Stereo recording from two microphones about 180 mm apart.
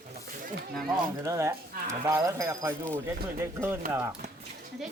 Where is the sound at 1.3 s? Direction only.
15° right (ahead or behind).